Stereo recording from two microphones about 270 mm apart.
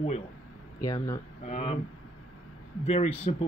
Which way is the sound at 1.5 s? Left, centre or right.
Left.